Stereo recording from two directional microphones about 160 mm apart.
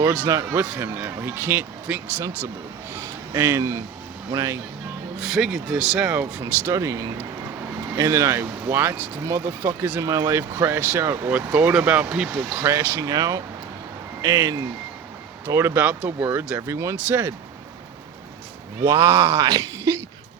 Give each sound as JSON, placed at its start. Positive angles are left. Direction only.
{"t": 0.3, "sound": "a man's voice", "side_deg": -20}
{"t": 5.2, "sound": "speech", "side_deg": 0}
{"t": 12.6, "sound": "speech", "side_deg": -20}
{"t": 18.9, "sound": "speech", "side_deg": -15}